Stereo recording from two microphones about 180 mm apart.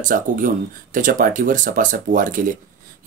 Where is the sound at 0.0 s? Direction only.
50° right (ahead or behind).